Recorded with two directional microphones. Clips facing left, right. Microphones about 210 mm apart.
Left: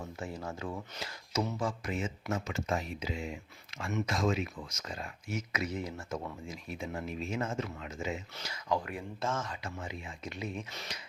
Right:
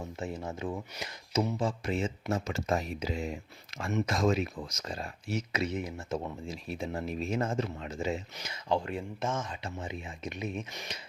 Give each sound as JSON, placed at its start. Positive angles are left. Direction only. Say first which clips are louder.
{"t": 0.0, "sound": "speech", "louder": "right 3 dB", "side_deg": -20}